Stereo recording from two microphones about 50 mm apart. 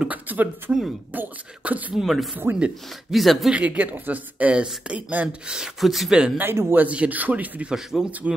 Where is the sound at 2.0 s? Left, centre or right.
Centre.